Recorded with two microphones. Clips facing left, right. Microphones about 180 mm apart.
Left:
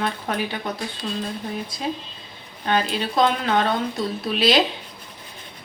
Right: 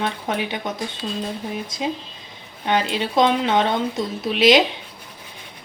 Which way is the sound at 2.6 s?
20° right (ahead or behind).